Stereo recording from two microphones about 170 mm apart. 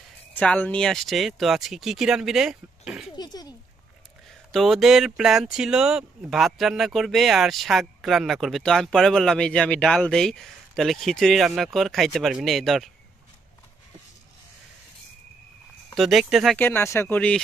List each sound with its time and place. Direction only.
0.3 s speech: 10° left (ahead or behind)
3.2 s speech: 25° left (ahead or behind)
4.5 s speech: centre (ahead or behind)
15.9 s speech: centre (ahead or behind)
16.5 s speech: 15° left (ahead or behind)